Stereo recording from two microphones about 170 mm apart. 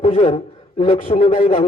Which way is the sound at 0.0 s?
45° left (ahead or behind).